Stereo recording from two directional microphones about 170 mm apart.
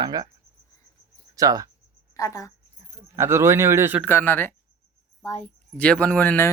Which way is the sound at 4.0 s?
15° left (ahead or behind).